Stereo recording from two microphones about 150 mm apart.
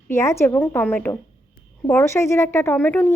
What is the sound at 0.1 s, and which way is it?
A woman's voice, 20° left (ahead or behind).